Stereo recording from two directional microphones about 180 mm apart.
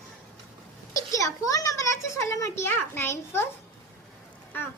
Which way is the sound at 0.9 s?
20° left (ahead or behind).